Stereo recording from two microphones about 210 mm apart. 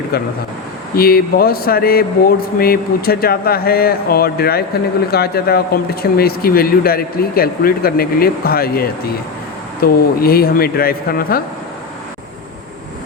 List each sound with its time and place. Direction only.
0.1 s speech: 45° left (ahead or behind)